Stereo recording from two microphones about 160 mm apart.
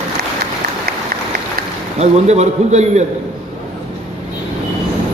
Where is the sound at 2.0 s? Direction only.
45° right (ahead or behind).